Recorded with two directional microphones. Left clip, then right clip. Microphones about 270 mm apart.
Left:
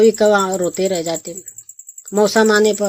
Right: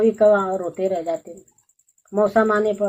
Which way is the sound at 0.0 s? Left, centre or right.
Left.